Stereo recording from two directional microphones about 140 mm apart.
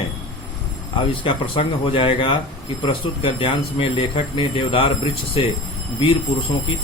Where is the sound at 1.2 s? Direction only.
40° left (ahead or behind).